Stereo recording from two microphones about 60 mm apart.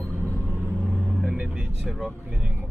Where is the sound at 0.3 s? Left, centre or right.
Left.